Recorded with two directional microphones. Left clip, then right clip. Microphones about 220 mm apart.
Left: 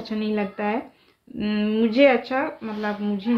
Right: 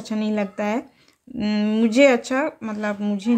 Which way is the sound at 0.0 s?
20° right (ahead or behind).